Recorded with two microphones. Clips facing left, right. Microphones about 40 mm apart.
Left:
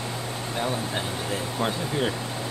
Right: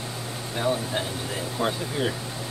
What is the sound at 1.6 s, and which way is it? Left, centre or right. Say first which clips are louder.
Speech: right 2 dB; left.